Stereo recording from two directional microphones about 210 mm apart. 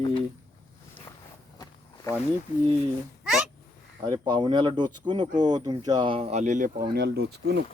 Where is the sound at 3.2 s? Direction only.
5° right (ahead or behind).